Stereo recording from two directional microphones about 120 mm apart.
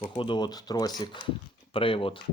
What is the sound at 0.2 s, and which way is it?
Speech, 40° left (ahead or behind).